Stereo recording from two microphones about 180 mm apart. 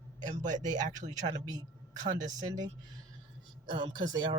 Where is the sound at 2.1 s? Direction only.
20° right (ahead or behind).